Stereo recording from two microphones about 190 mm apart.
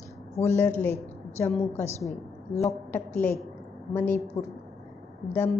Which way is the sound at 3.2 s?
10° left (ahead or behind).